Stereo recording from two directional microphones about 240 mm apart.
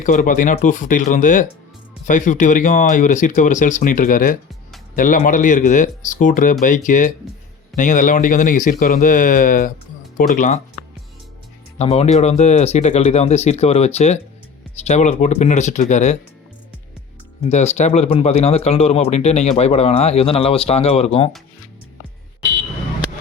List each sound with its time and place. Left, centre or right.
0.0 s speech: left
11.8 s speech: left
17.5 s speech: left